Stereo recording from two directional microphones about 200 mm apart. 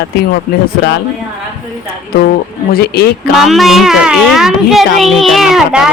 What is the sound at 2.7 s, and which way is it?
Speech, 50° left (ahead or behind).